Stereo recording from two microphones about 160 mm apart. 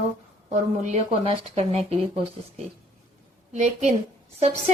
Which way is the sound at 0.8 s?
40° right (ahead or behind).